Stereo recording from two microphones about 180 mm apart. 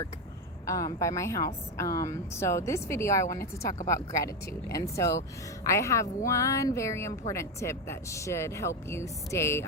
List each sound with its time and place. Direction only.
0.6 s speech: 20° left (ahead or behind)